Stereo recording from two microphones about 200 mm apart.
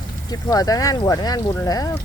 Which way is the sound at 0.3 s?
20° left (ahead or behind).